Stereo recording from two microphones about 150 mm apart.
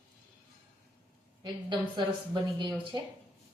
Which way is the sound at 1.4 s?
30° right (ahead or behind).